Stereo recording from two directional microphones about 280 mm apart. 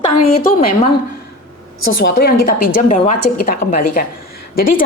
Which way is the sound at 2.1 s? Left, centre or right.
Left.